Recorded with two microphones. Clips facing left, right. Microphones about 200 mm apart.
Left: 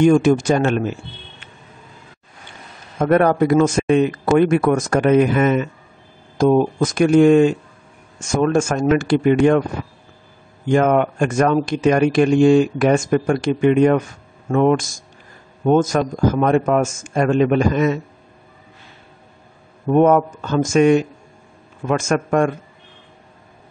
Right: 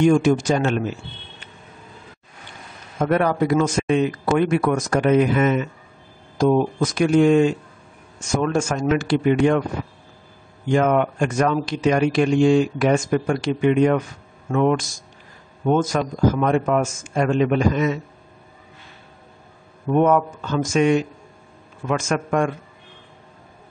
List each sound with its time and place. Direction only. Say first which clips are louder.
0.0 s speech: left 3 dB; 50° left (ahead or behind)
3.0 s speech: left 4 dB; 50° left (ahead or behind)
10.7 s speech: left 3 dB; 50° left (ahead or behind)
19.9 s speech: left 4 dB; 45° left (ahead or behind)